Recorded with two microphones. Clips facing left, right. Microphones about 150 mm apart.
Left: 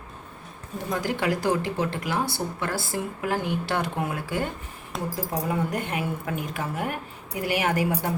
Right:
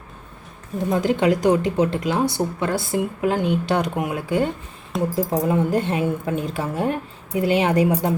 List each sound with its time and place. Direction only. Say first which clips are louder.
0.9 s speech: right 7 dB; 25° right (ahead or behind)